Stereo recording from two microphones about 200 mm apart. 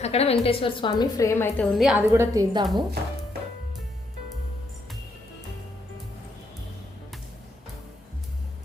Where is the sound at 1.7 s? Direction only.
Centre (ahead or behind).